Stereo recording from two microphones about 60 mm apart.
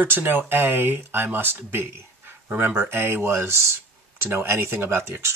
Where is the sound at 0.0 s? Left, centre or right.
Right.